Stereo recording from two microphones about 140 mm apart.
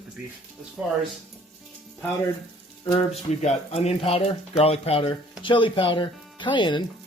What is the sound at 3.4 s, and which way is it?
Speech, 50° left (ahead or behind).